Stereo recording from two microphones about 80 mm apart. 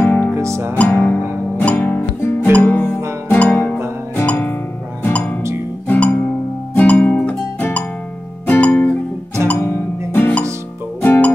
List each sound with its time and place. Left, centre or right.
0.0 s music: left
0.4 s music: right
0.7 s music: left
1.6 s guitar: centre
2.5 s music: left
10.1 s music: left